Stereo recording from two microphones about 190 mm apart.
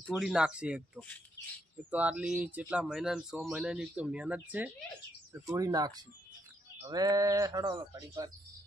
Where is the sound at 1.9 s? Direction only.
5° right (ahead or behind).